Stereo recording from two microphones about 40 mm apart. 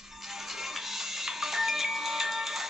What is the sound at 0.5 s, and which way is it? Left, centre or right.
Music, centre.